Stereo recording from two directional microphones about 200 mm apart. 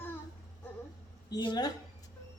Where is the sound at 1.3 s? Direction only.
20° left (ahead or behind).